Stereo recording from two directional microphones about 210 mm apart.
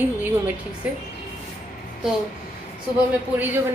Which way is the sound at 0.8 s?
5° right (ahead or behind).